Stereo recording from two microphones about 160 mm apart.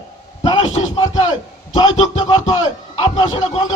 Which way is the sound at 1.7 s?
30° left (ahead or behind).